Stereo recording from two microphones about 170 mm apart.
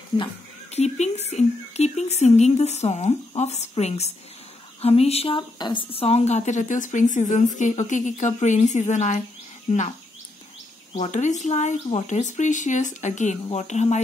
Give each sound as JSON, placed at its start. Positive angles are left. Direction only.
{"t": 0.2, "sound": "a woman's voice", "side_deg": 40}